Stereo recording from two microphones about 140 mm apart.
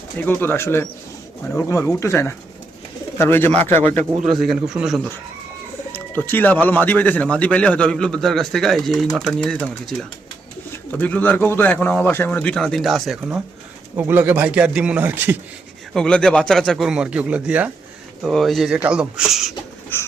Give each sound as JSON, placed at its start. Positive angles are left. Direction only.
{"t": 0.2, "sound": "speech", "side_deg": 15}
{"t": 3.8, "sound": "speech", "side_deg": -55}
{"t": 4.3, "sound": "speech", "side_deg": 0}
{"t": 5.9, "sound": "speech", "side_deg": 15}
{"t": 13.9, "sound": "speech", "side_deg": -15}
{"t": 15.9, "sound": "speech", "side_deg": 5}
{"t": 18.2, "sound": "speech", "side_deg": 0}
{"t": 19.9, "sound": "a sound", "side_deg": 15}